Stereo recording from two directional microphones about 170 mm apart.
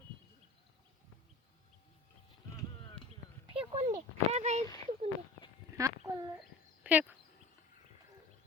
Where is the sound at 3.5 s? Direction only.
30° right (ahead or behind).